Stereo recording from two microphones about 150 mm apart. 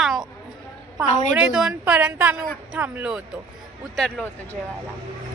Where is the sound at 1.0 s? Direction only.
55° left (ahead or behind).